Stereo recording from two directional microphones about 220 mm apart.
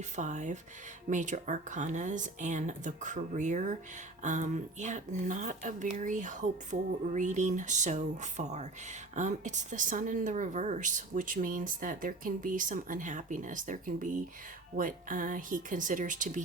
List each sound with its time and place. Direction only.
0.2 s speech: 35° right (ahead or behind)